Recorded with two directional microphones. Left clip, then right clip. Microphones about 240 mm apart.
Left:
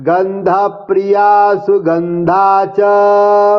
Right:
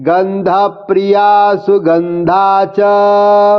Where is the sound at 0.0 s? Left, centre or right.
Right.